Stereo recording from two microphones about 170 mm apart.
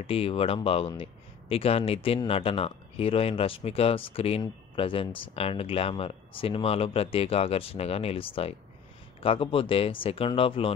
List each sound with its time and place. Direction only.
0.0 s speech: 35° left (ahead or behind)